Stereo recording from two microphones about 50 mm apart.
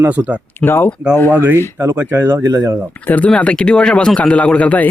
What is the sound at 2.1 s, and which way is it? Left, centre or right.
Speech, right.